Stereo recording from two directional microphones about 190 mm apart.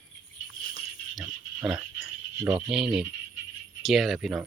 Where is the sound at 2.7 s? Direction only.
5° right (ahead or behind).